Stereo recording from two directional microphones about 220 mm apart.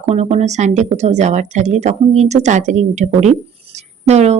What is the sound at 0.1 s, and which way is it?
A woman's voice, 30° right (ahead or behind).